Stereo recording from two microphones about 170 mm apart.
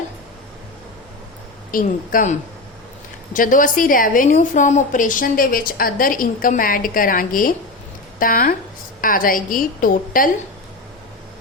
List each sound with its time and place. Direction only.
1.7 s a woman's voice: 55° left (ahead or behind)
3.3 s a woman's voice: 50° left (ahead or behind)